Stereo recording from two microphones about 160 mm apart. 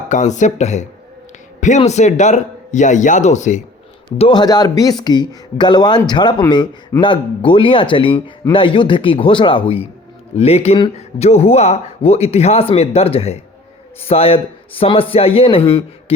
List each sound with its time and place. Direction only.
0.1 s speech: 50° left (ahead or behind)
4.2 s speech: 30° left (ahead or behind)